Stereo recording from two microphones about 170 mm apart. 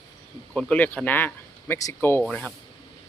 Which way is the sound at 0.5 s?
5° left (ahead or behind).